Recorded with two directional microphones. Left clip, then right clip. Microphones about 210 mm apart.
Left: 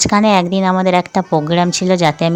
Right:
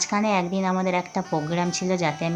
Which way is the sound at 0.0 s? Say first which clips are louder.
Left 11 dB; 40° left (ahead or behind).